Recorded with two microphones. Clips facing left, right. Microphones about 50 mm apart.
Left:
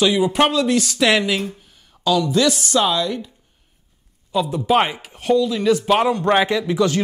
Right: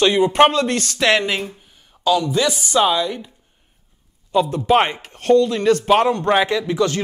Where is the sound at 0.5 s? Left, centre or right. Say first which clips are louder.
Left 1 dB; right.